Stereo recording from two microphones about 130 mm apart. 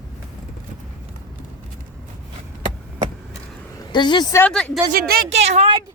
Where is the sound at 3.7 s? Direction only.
35° left (ahead or behind).